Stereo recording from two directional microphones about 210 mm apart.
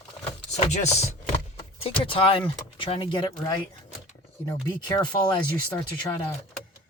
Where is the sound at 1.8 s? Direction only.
25° left (ahead or behind).